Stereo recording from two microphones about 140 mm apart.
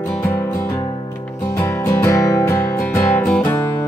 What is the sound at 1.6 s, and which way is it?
Music, 20° left (ahead or behind).